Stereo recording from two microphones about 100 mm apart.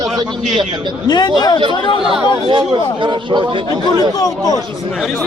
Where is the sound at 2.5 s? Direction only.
55° right (ahead or behind).